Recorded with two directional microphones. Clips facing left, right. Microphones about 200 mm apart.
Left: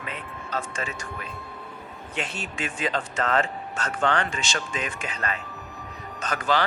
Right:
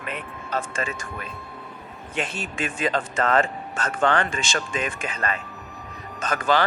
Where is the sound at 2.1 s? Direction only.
50° right (ahead or behind).